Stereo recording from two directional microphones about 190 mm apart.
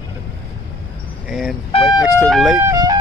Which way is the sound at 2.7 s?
20° right (ahead or behind).